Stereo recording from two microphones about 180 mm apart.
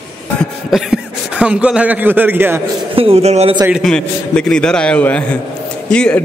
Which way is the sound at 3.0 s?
35° right (ahead or behind).